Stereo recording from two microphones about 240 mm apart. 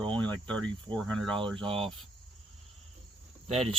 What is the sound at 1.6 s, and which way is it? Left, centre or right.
Speech, right.